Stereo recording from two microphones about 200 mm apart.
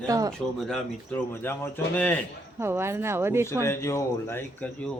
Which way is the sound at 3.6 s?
15° left (ahead or behind).